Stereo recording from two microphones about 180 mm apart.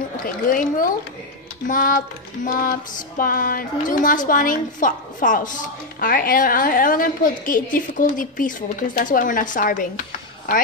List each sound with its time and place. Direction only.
0.5 s a woman's voice: 50° left (ahead or behind)